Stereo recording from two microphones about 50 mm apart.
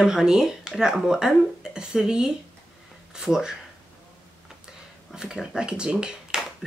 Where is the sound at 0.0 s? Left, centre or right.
Centre.